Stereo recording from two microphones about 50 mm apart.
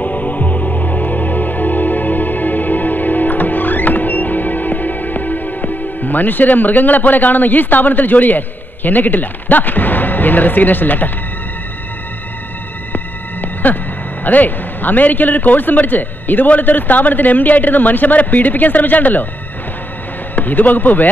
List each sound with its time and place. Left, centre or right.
0.0 s music: left
12.9 s a sound: left
14.2 s a man's voice: left
20.3 s a man's voice: left